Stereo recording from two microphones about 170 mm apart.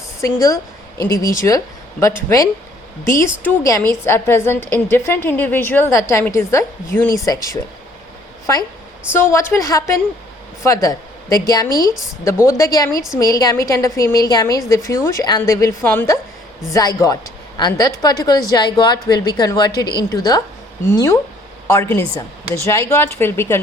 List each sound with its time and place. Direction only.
0.3 s a woman's voice: 20° left (ahead or behind)
9.1 s a woman's voice: 15° left (ahead or behind)